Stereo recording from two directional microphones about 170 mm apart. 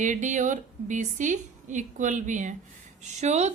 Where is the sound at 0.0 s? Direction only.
45° right (ahead or behind).